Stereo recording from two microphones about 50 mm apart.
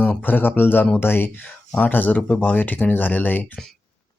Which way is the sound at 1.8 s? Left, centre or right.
Left.